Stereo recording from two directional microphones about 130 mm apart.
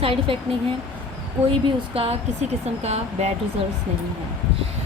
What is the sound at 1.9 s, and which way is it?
Speech, 50° right (ahead or behind).